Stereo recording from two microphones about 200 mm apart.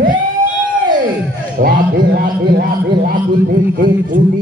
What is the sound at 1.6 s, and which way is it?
A man's voice, 50° right (ahead or behind).